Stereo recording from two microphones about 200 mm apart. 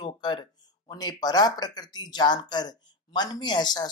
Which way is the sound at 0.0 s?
20° left (ahead or behind).